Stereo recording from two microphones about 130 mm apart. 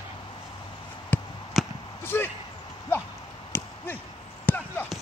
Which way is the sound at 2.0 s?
15° left (ahead or behind).